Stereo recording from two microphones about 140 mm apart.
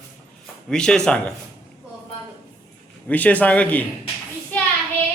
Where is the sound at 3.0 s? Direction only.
10° left (ahead or behind).